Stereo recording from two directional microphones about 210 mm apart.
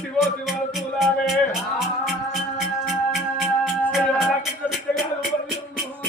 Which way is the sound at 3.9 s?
Centre (ahead or behind).